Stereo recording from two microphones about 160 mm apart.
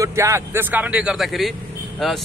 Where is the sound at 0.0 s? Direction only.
20° right (ahead or behind).